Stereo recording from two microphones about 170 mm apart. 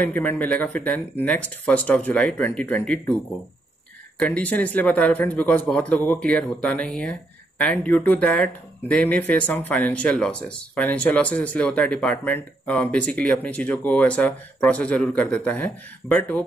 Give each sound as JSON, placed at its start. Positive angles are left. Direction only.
{"t": 0.0, "sound": "speech", "side_deg": 10}
{"t": 4.2, "sound": "speech", "side_deg": 10}